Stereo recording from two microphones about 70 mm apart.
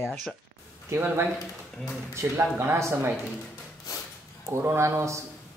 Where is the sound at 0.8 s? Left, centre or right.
Right.